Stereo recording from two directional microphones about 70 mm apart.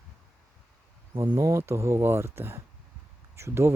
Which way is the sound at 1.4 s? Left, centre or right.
Right.